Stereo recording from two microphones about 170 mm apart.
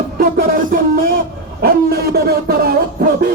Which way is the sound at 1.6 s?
65° right (ahead or behind).